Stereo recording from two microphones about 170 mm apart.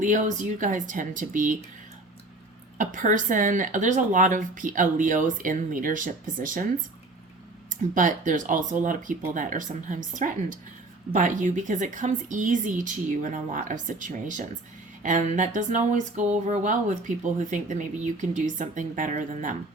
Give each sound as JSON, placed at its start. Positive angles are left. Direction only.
{"t": 0.0, "sound": "speech", "side_deg": -50}
{"t": 2.7, "sound": "speech", "side_deg": -50}
{"t": 7.9, "sound": "speech", "side_deg": -50}